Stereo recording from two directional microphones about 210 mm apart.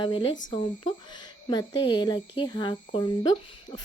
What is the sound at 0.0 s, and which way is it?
Speech, 25° left (ahead or behind).